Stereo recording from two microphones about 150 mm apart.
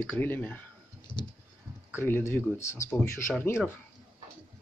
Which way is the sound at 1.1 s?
35° left (ahead or behind).